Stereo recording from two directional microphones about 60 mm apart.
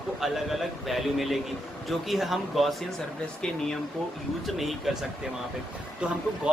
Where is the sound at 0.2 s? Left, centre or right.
Centre.